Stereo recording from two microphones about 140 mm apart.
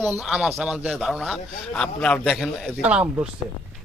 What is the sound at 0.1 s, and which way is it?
A man's voice, 5° right (ahead or behind).